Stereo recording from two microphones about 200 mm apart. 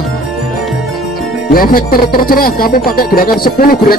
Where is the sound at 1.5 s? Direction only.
45° left (ahead or behind).